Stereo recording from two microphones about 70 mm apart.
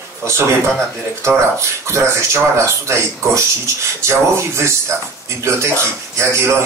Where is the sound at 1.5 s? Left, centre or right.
Right.